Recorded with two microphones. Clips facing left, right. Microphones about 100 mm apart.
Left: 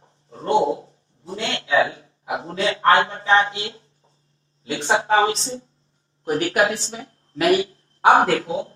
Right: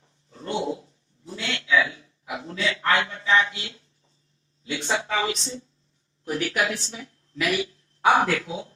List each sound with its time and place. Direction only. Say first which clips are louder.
0.0 s dog: left 7 dB; 45° left (ahead or behind)
1.4 s a sound: left 4 dB; 40° left (ahead or behind)
4.6 s a woman's voice: left 6 dB; 45° left (ahead or behind)